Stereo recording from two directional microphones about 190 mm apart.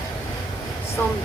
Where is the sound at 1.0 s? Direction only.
10° left (ahead or behind).